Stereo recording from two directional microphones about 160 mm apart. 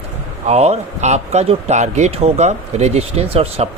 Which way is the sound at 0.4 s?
40° right (ahead or behind).